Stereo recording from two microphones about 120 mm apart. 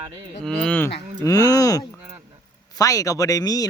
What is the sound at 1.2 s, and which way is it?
Speech, 30° left (ahead or behind).